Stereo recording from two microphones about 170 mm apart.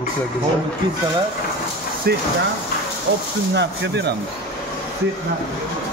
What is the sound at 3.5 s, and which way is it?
Speech, 90° right.